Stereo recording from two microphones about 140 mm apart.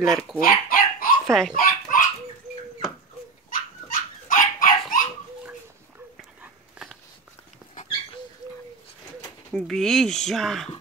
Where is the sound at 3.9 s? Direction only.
80° left.